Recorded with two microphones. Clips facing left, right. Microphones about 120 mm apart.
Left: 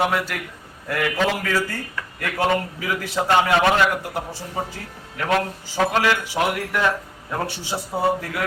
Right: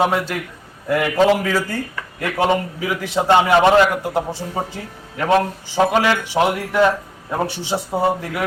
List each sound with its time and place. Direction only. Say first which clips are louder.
0.0 s speech: right 4 dB; 25° right (ahead or behind)